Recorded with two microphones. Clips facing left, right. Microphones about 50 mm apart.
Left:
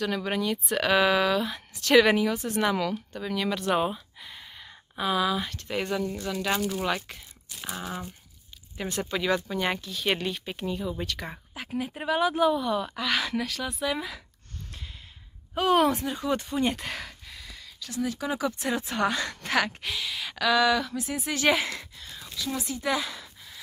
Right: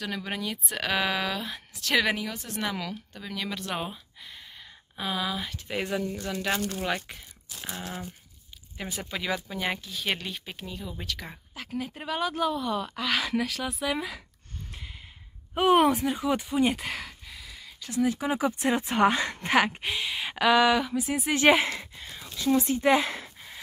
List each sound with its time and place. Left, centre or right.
0.0 s speech: centre
8.7 s speech: centre
11.5 s speech: centre
15.5 s speech: right
15.9 s speech: centre
17.7 s speech: right